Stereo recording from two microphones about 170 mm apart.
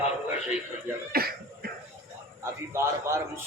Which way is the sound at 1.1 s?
65° right (ahead or behind).